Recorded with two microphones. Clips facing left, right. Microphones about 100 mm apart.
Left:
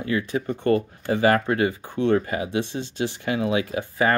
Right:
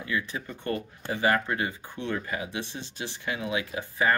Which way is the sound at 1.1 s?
75° left (ahead or behind).